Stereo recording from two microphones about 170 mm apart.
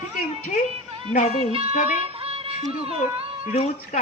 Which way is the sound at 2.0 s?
35° right (ahead or behind).